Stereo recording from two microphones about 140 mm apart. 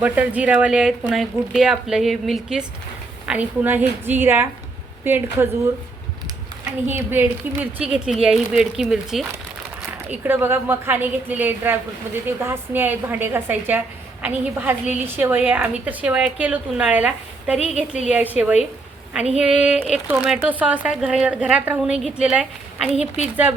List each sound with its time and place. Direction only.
0.0 s a woman's voice: 10° right (ahead or behind)
6.8 s a woman's voice: 15° right (ahead or behind)
22.9 s a woman's voice: 50° left (ahead or behind)
23.2 s a woman's voice: 10° right (ahead or behind)